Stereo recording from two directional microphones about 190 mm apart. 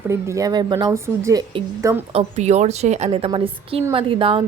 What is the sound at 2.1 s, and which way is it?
A woman's voice, 35° right (ahead or behind).